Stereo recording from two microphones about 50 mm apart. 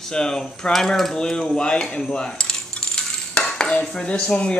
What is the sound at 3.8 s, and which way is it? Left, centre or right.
Speech, centre.